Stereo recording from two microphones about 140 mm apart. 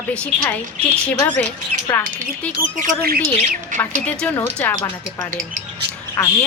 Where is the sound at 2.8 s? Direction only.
90° right.